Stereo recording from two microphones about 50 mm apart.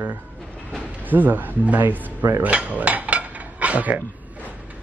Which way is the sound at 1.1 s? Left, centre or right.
Right.